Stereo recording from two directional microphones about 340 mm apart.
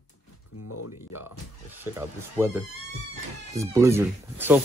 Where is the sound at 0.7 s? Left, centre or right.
Left.